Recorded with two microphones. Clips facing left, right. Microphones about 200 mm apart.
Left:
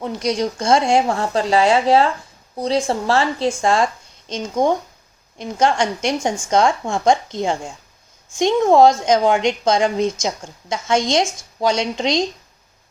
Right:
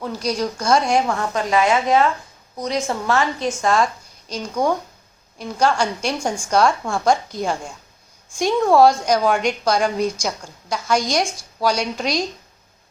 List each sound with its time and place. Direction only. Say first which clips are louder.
0.0 s a woman's voice: left 2 dB; 25° left (ahead or behind)